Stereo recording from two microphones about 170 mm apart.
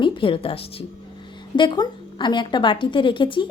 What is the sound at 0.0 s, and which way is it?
A woman's voice, 30° left (ahead or behind).